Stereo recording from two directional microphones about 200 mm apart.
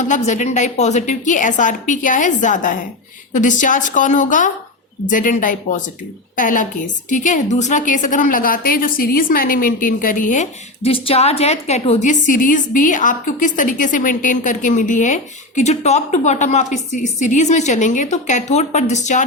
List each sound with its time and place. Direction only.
0.0 s a woman's voice: 35° left (ahead or behind)